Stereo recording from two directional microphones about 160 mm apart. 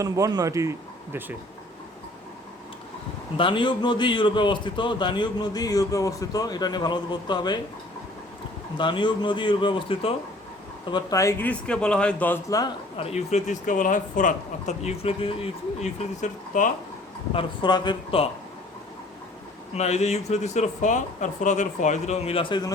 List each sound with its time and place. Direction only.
0.0 s speech: 25° right (ahead or behind)
3.3 s a man's voice: 30° left (ahead or behind)
8.8 s a man's voice: 30° left (ahead or behind)
10.9 s a man's voice: 20° left (ahead or behind)
13.0 s speech: 40° left (ahead or behind)
17.3 s a man's voice: 30° left (ahead or behind)
19.7 s speech: 45° left (ahead or behind)